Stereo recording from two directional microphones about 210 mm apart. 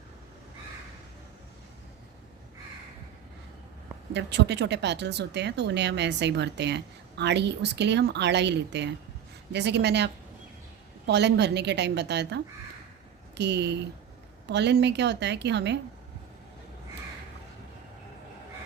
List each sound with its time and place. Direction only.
4.1 s a woman's voice: 55° right (ahead or behind)